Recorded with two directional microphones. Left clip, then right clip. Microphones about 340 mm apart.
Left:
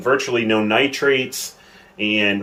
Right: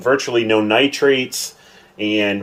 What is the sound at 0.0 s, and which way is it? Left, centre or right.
Speech, centre.